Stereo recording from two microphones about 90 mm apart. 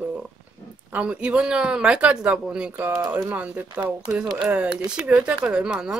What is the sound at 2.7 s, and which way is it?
Speech, 25° right (ahead or behind).